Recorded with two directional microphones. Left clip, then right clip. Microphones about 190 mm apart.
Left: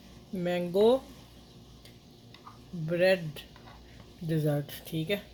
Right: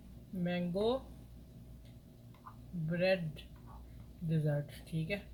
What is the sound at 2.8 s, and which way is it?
Speech, 45° left (ahead or behind).